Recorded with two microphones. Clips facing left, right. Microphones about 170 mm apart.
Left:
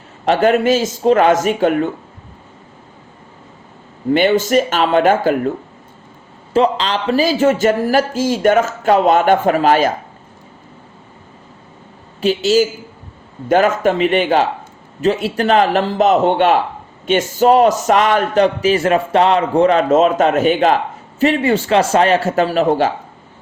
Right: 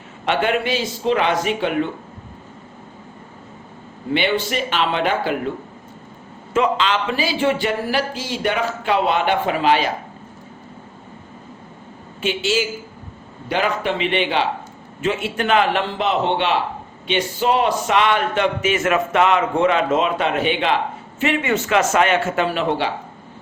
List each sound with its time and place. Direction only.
0.3 s a man's voice: 40° left (ahead or behind)
4.1 s a man's voice: 45° left (ahead or behind)
6.5 s a man's voice: 35° left (ahead or behind)
12.2 s a man's voice: 40° left (ahead or behind)